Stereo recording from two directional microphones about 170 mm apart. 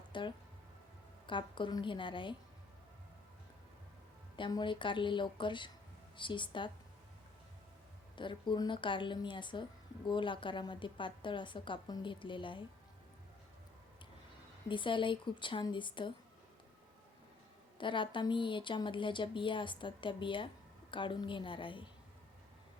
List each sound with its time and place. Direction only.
0.1 s speech: 30° left (ahead or behind)
4.4 s speech: 25° left (ahead or behind)
8.1 s speech: 30° left (ahead or behind)
14.7 s speech: 30° left (ahead or behind)
17.7 s speech: 30° left (ahead or behind)